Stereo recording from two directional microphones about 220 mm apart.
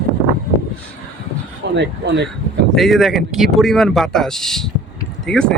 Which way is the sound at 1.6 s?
50° right (ahead or behind).